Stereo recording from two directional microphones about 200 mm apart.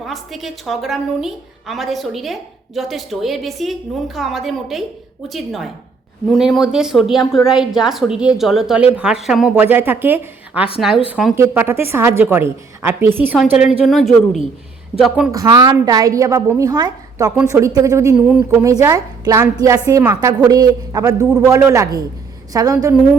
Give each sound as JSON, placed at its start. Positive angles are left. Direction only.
{"t": 0.0, "sound": "a woman's voice", "side_deg": 0}
{"t": 11.3, "sound": "a woman's voice", "side_deg": -10}
{"t": 15.3, "sound": "a woman's voice", "side_deg": -20}